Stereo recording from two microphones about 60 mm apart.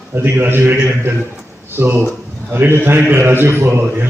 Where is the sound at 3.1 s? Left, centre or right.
Right.